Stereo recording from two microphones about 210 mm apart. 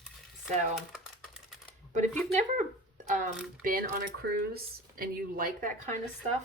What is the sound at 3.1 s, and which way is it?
Speech, 35° right (ahead or behind).